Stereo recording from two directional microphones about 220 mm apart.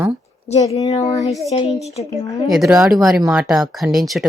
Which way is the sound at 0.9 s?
15° left (ahead or behind).